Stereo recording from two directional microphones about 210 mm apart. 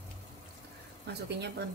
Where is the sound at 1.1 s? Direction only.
55° right (ahead or behind).